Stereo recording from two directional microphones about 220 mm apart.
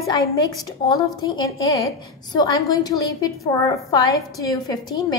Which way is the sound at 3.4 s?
15° left (ahead or behind).